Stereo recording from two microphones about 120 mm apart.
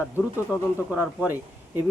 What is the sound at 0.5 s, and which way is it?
Speech, 30° left (ahead or behind).